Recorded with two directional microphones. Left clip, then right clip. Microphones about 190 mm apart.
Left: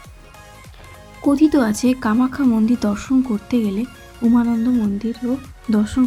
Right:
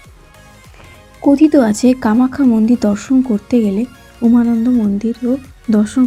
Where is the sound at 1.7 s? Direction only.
15° right (ahead or behind).